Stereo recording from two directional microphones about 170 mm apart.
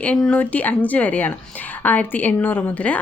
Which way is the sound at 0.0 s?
5° left (ahead or behind).